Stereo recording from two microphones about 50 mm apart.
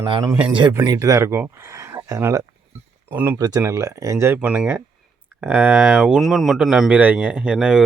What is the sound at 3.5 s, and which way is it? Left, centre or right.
Speech, right.